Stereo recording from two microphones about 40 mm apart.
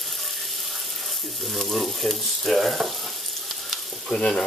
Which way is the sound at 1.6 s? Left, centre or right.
Centre.